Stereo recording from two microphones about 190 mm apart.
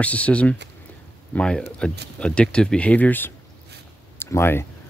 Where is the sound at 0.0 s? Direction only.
5° left (ahead or behind).